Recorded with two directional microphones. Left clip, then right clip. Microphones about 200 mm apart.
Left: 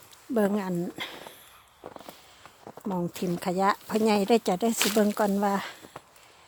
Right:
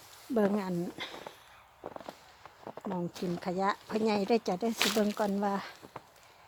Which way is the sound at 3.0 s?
35° left (ahead or behind).